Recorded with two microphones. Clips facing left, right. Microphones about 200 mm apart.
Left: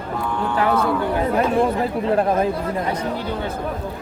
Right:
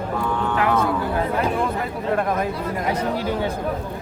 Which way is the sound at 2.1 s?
30° left (ahead or behind).